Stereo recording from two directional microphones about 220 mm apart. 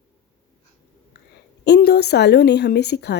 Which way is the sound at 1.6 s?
50° left (ahead or behind).